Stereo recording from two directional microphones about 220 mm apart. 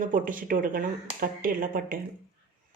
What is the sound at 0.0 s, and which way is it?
Speech, 40° right (ahead or behind).